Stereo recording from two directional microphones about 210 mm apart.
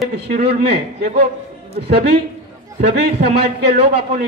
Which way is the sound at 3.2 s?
50° right (ahead or behind).